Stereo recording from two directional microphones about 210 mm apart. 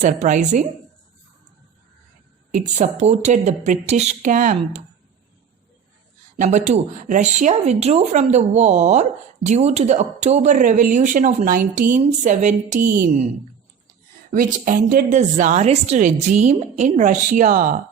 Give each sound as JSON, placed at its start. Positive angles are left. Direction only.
{"t": 0.0, "sound": "speech", "side_deg": -35}
{"t": 2.5, "sound": "speech", "side_deg": -35}
{"t": 6.4, "sound": "speech", "side_deg": -35}
{"t": 14.3, "sound": "speech", "side_deg": -40}